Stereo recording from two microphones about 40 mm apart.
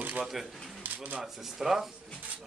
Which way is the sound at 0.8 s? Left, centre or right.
Right.